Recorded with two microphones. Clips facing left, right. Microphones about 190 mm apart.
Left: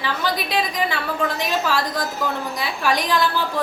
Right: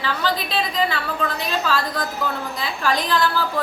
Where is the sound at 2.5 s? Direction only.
15° left (ahead or behind).